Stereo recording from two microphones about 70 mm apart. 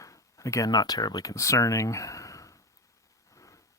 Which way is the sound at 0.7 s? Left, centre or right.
Left.